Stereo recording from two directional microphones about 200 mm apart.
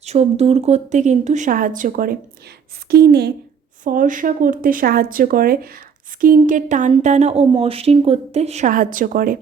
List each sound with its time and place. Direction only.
0.0 s a woman's voice: 35° right (ahead or behind); by 3.3 s 55° right (ahead or behind)
3.8 s a woman's voice: 40° right (ahead or behind)